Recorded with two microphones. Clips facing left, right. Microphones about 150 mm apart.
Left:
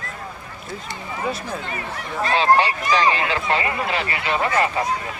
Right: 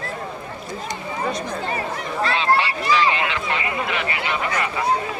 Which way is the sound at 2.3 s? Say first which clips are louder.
Left 5 dB; 35° left (ahead or behind).